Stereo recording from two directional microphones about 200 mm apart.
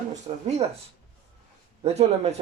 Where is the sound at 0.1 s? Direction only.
35° right (ahead or behind).